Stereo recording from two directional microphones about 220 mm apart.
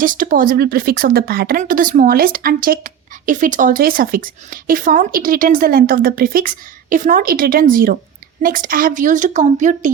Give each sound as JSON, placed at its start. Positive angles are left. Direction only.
{"t": 0.0, "sound": "speech", "side_deg": -35}